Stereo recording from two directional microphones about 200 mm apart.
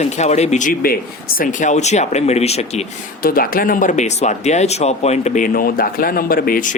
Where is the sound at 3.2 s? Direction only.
45° left (ahead or behind).